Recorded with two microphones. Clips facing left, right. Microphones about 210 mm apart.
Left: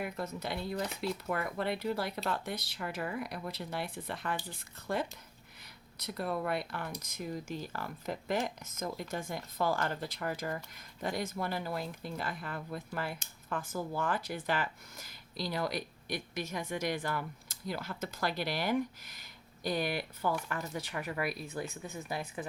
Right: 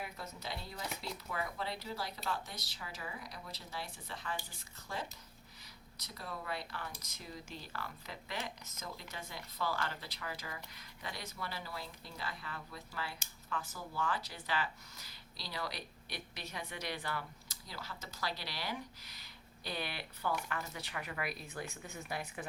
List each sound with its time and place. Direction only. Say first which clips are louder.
0.0 s speech: left 8 dB; 55° left (ahead or behind); by 21.6 s 40° left (ahead or behind)